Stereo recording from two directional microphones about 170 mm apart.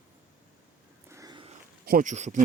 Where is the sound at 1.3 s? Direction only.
35° right (ahead or behind).